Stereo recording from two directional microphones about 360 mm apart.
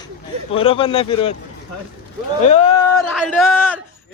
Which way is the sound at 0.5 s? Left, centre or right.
Centre.